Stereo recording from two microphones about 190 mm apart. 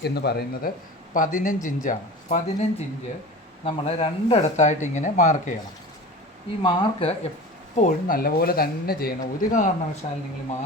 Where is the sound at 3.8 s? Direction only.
30° left (ahead or behind).